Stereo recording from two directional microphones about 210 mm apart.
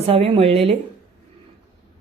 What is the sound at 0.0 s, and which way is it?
Speech, 25° right (ahead or behind).